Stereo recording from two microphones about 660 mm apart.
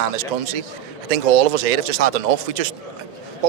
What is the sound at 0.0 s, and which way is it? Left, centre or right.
A man's voice, right.